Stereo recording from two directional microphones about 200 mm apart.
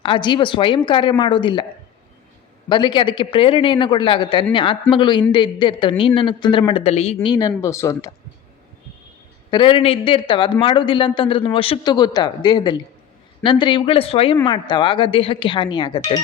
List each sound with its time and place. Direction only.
0.0 s a man's voice: 25° left (ahead or behind)
2.6 s a man's voice: 25° left (ahead or behind)
9.5 s a man's voice: 25° left (ahead or behind)